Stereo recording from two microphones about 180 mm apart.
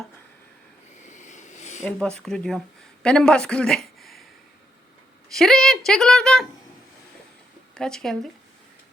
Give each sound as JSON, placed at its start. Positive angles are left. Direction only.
{"t": 1.0, "sound": "a sound", "side_deg": 40}
{"t": 1.8, "sound": "speech", "side_deg": 5}
{"t": 5.3, "sound": "speech", "side_deg": 0}
{"t": 7.8, "sound": "speech", "side_deg": 5}